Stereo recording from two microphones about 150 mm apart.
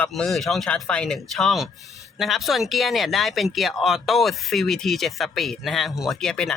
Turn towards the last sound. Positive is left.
turn(degrees=5)  # may be behind; listen again after turning